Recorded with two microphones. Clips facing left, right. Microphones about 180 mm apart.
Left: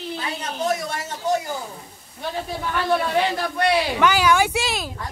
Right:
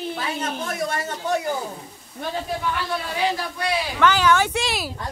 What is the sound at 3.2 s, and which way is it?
Speech, 65° left (ahead or behind).